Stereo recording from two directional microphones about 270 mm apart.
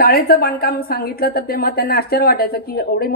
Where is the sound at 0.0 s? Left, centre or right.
Left.